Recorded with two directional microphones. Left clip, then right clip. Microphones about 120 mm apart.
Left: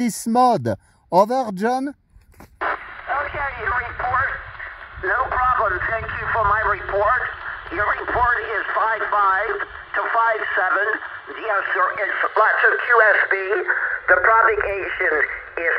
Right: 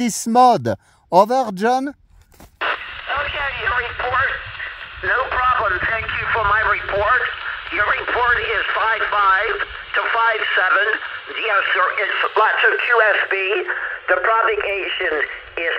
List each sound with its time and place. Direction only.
0.3 s speech: 10° right (ahead or behind)
2.6 s radio: 40° right (ahead or behind)